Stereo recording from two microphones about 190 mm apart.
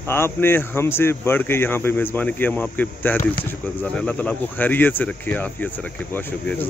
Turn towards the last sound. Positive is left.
turn(degrees=10)  # may be behind; listen again after turning